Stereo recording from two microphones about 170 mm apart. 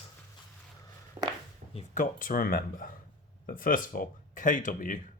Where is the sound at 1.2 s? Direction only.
25° right (ahead or behind).